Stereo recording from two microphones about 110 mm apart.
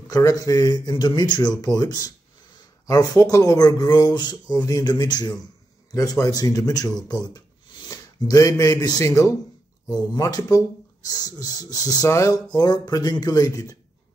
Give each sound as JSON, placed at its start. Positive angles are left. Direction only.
{"t": 0.1, "sound": "speech", "side_deg": 30}